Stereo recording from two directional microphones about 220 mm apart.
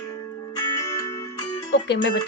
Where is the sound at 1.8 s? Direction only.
50° left (ahead or behind).